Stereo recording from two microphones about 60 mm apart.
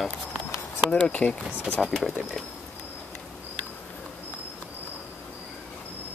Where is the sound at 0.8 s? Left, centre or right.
Left.